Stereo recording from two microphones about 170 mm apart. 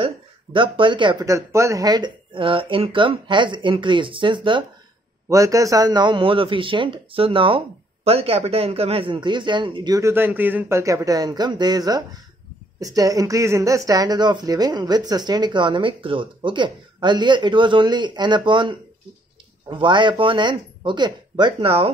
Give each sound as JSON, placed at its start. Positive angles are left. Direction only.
{"t": 0.0, "sound": "speech", "side_deg": -30}